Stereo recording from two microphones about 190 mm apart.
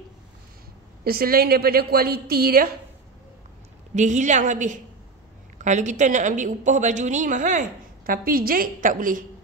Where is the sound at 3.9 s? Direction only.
40° right (ahead or behind).